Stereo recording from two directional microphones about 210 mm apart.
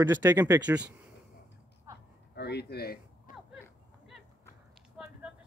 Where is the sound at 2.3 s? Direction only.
50° left (ahead or behind).